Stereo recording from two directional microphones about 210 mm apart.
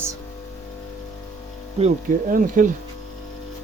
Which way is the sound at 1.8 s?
40° right (ahead or behind).